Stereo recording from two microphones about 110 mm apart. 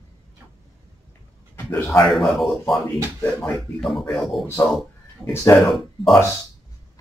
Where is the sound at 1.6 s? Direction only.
15° left (ahead or behind).